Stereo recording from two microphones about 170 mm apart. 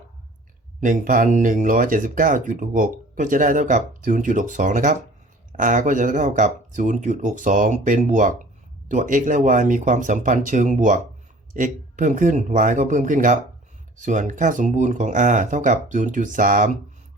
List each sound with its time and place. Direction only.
0.8 s speech: 50° right (ahead or behind)